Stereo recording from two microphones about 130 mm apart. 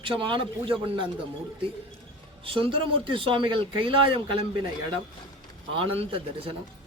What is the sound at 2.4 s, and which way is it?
Speech, 45° right (ahead or behind).